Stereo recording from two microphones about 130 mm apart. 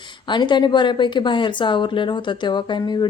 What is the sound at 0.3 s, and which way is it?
A woman's voice, 35° left (ahead or behind).